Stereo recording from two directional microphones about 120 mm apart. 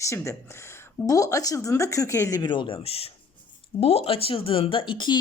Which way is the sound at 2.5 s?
45° left (ahead or behind).